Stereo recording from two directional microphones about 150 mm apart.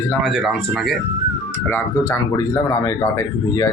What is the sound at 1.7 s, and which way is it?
Speech, 20° left (ahead or behind).